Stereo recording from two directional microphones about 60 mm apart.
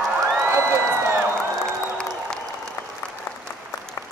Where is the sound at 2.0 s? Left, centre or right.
Centre.